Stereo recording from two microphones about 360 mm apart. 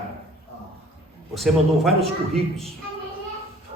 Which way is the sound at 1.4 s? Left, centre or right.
Centre.